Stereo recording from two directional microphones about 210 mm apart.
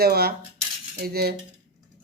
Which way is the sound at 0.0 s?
45° right (ahead or behind).